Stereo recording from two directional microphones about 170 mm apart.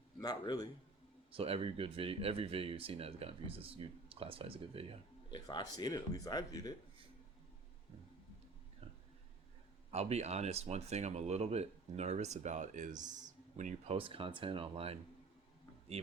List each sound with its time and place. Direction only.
0.2 s speech: 25° left (ahead or behind)
1.3 s speech: 35° right (ahead or behind)
5.3 s speech: 25° left (ahead or behind)
8.8 s a sound: 35° right (ahead or behind)
9.9 s speech: 40° right (ahead or behind)